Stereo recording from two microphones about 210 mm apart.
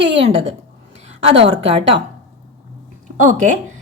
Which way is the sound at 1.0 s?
25° right (ahead or behind).